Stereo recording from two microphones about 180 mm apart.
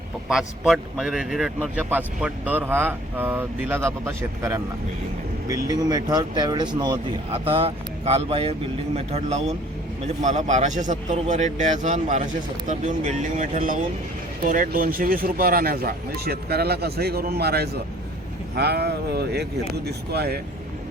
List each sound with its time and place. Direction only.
0.3 s a man's voice: 5° right (ahead or behind); by 20.4 s 60° right (ahead or behind)